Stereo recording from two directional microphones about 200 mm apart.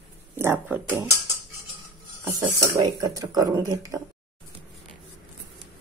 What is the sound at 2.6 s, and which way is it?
Speech, 15° right (ahead or behind).